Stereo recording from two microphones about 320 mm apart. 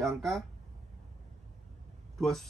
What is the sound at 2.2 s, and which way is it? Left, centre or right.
Speech, centre.